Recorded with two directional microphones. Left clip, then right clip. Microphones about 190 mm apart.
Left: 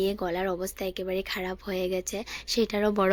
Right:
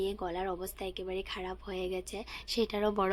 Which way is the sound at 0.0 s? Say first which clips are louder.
Left 6 dB; 25° left (ahead or behind).